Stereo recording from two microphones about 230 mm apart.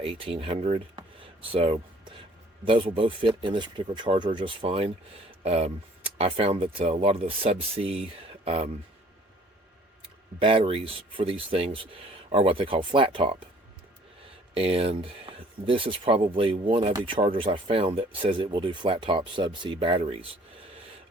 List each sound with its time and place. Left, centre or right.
0.0 s speech: right
10.4 s speech: right
14.5 s speech: right